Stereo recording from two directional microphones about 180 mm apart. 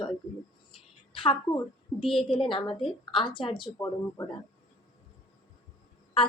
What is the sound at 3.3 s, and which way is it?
Speech, 30° left (ahead or behind).